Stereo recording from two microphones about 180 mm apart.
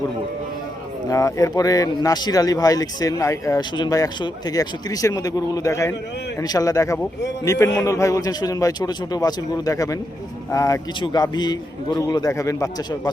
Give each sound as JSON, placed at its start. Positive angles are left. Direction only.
{"t": 1.1, "sound": "a man's voice", "side_deg": 20}